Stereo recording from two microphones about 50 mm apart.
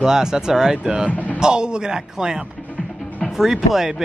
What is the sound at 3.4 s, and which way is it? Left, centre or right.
Speech, centre.